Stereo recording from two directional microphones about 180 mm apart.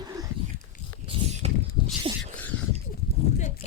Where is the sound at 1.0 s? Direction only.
35° right (ahead or behind).